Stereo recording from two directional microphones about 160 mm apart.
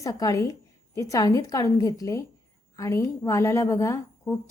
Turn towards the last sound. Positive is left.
turn(degrees=20)  # may be behind; listen again after turning